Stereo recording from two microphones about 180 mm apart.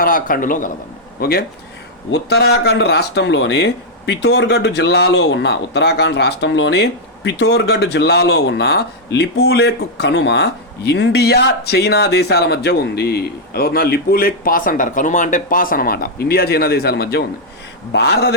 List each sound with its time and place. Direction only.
0.0 s a man's voice: 50° left (ahead or behind)